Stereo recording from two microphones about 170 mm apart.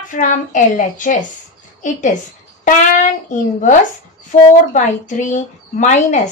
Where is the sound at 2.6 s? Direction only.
45° left (ahead or behind).